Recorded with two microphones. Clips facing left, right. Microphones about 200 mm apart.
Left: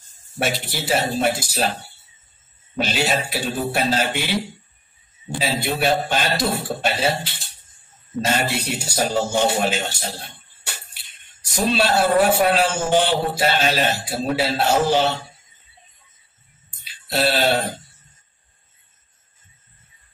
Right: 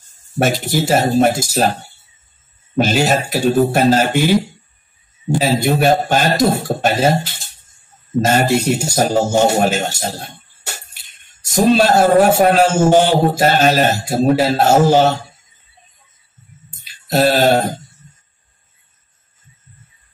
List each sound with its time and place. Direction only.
0.4 s speech: 45° right (ahead or behind)
2.8 s speech: 45° right (ahead or behind)
16.8 s a sound: 45° right (ahead or behind)